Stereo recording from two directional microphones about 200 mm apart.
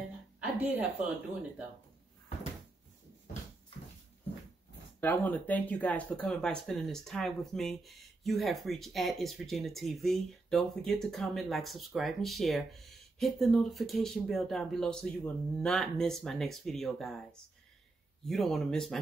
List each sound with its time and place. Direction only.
0.4 s a woman's voice: 10° right (ahead or behind)
5.0 s speech: 10° left (ahead or behind)
18.2 s speech: centre (ahead or behind)